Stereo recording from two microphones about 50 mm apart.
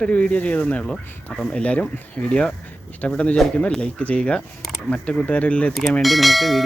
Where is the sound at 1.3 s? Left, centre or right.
Centre.